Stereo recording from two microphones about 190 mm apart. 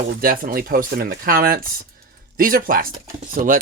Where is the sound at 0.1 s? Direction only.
50° right (ahead or behind).